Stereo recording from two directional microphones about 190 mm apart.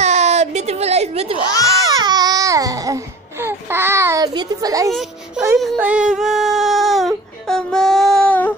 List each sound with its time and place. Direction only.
0.0 s baby cry: 35° right (ahead or behind); by 4.9 s 20° right (ahead or behind)
5.4 s music: 5° right (ahead or behind)
5.8 s baby cry: 5° right (ahead or behind)